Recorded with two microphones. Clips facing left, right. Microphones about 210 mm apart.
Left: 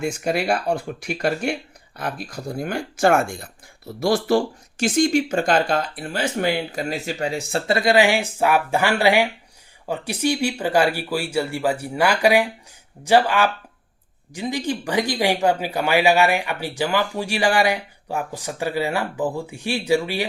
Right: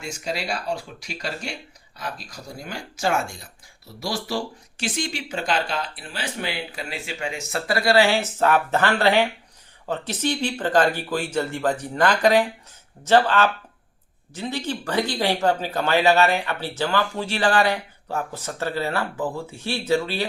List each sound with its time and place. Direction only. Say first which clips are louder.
0.0 s speech: left 7 dB; 55° left (ahead or behind); by 20.2 s 15° left (ahead or behind)